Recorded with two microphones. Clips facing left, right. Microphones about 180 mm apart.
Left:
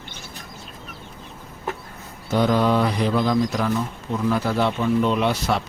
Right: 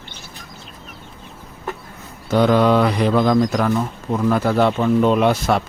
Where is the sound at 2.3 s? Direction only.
85° right; by 3.4 s 55° right (ahead or behind).